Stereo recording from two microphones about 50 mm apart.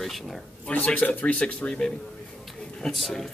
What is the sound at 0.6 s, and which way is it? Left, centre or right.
Speech, left.